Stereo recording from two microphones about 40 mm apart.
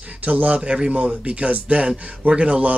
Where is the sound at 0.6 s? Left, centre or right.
Right.